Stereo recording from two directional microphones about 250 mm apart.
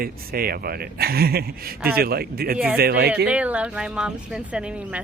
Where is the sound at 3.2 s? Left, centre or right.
Centre.